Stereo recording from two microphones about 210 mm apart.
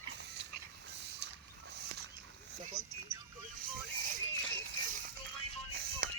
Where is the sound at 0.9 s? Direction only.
55° right (ahead or behind).